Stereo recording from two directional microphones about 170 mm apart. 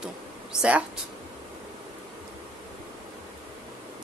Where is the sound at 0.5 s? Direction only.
5° right (ahead or behind).